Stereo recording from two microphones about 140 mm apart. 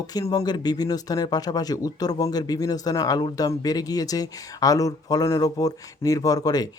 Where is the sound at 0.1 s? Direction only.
30° left (ahead or behind).